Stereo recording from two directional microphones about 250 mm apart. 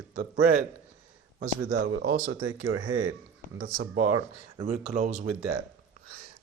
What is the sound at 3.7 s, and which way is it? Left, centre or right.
Speech, right.